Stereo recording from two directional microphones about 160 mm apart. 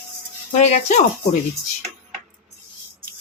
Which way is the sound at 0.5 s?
45° left (ahead or behind).